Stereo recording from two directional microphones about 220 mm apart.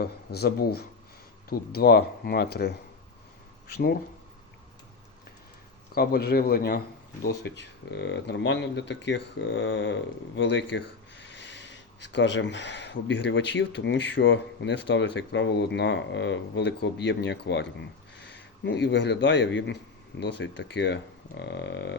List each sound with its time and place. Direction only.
0.0 s speech: 45° left (ahead or behind)
5.9 s speech: 45° left (ahead or behind)